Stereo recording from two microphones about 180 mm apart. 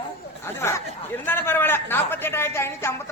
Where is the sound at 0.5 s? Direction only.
15° left (ahead or behind).